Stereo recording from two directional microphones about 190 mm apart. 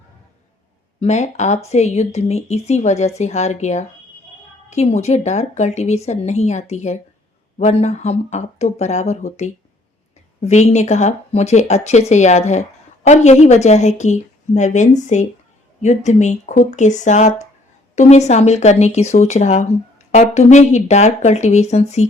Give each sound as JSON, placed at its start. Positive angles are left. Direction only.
{"t": 0.9, "sound": "speech", "side_deg": 35}